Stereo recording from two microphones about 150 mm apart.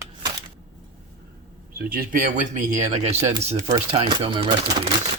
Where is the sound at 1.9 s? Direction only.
70° right (ahead or behind); by 3.3 s 45° right (ahead or behind).